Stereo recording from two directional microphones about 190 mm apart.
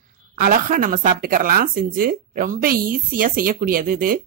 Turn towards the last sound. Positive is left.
turn(degrees=-50)  # may be behind; listen again after turning